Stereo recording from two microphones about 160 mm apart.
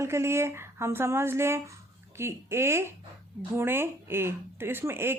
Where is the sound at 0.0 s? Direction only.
15° right (ahead or behind).